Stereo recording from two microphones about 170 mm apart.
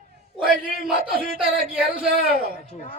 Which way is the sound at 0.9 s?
60° right (ahead or behind).